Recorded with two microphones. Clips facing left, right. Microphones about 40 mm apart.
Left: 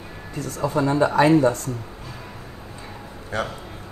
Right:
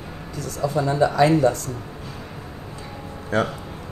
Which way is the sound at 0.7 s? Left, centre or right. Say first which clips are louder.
Even; left.